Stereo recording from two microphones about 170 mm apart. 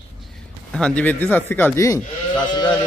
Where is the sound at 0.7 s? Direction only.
5° left (ahead or behind).